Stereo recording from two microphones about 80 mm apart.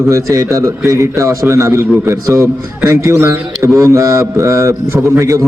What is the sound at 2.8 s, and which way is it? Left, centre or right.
A man's voice, right.